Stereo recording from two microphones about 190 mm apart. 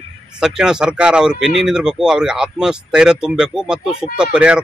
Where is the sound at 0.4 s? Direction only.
5° right (ahead or behind).